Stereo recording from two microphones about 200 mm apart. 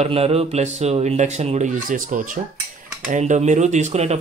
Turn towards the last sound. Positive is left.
turn(degrees=-35)  # may be behind; listen again after turning